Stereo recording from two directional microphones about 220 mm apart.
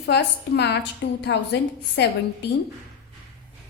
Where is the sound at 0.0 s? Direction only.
50° left (ahead or behind).